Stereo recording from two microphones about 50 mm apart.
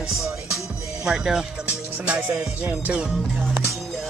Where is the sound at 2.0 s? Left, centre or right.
Right.